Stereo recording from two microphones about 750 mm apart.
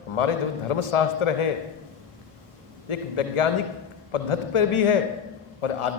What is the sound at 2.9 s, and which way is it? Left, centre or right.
A man's voice, left.